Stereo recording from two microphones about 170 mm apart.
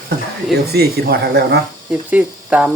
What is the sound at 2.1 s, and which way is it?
Speech, 10° right (ahead or behind).